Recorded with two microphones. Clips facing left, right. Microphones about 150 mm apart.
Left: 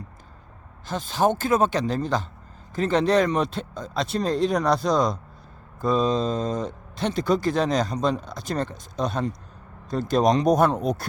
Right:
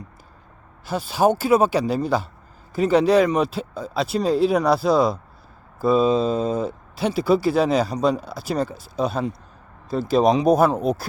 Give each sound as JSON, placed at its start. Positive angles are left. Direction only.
{"t": 0.9, "sound": "speech", "side_deg": -10}